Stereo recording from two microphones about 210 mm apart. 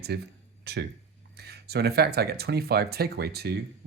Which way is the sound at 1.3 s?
50° right (ahead or behind).